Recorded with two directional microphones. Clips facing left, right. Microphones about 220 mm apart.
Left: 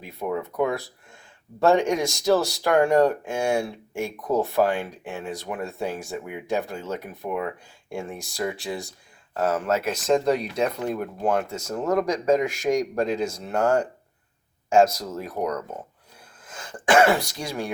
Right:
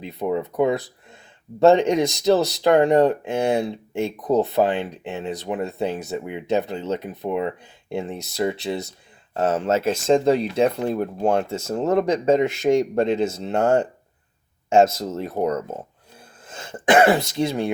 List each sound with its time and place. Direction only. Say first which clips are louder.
0.0 s speech: right 4 dB; 20° right (ahead or behind)